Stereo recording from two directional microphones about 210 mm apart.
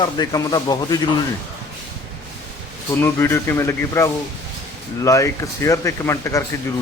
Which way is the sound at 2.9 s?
10° left (ahead or behind).